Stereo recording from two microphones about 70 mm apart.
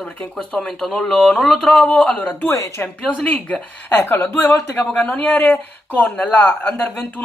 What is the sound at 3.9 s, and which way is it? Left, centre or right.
Speech, left.